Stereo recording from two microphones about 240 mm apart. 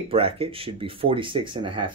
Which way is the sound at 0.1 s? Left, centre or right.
Right.